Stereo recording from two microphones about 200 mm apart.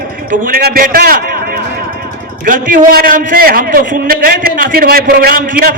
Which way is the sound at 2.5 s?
40° right (ahead or behind).